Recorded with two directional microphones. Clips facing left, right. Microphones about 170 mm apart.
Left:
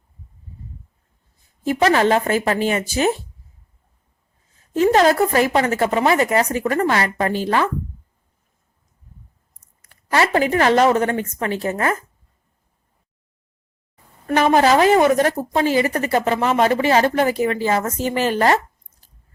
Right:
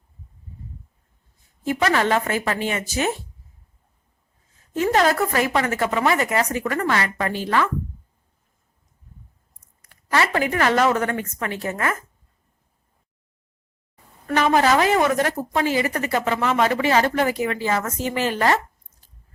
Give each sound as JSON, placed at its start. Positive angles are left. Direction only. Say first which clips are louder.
{"t": 1.6, "sound": "speech", "louder": "left 4 dB", "side_deg": 30}
{"t": 4.8, "sound": "speech", "louder": "left 4 dB", "side_deg": 30}
{"t": 10.1, "sound": "speech", "louder": "left 4 dB", "side_deg": 30}
{"t": 14.3, "sound": "speech", "louder": "left 3 dB", "side_deg": 35}